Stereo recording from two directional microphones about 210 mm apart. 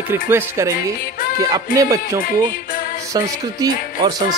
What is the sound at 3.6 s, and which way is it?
Speech, 15° right (ahead or behind).